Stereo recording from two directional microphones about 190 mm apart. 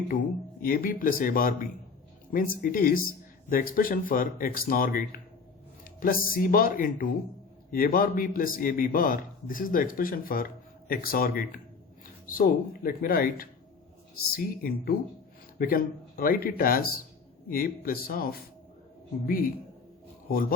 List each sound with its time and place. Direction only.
0.6 s a man's voice: 50° left (ahead or behind)